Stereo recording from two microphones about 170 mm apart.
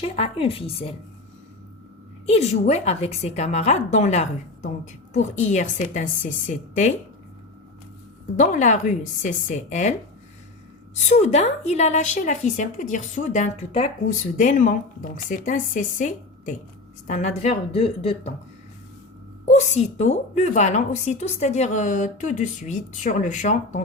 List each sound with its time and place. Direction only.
0.0 s speech: 35° left (ahead or behind)
2.2 s a woman's voice: 40° left (ahead or behind)
8.4 s a woman's voice: 45° left (ahead or behind)
11.1 s a woman's voice: 40° left (ahead or behind)
19.5 s a woman's voice: 45° left (ahead or behind)